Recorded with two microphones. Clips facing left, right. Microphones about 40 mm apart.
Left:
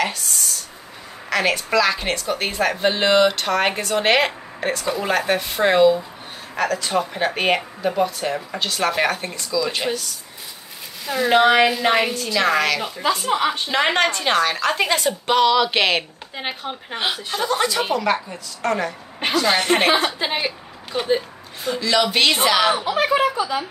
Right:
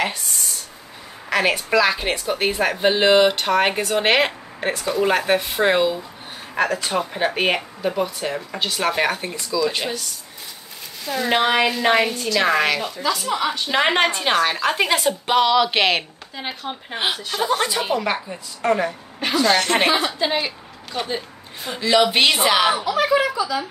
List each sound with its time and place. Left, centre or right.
0.0 s a sound: centre
1.3 s a woman's voice: centre
9.8 s a woman's voice: centre
11.1 s a woman's voice: centre
12.9 s a woman's voice: left
13.7 s a woman's voice: centre
16.4 s a woman's voice: left
16.9 s a woman's voice: centre
19.4 s a woman's voice: centre
21.6 s a woman's voice: centre
22.8 s speech: left